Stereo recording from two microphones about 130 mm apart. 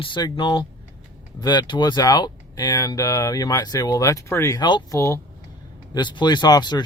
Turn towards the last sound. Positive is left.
turn(degrees=35)  # may be behind; listen again after turning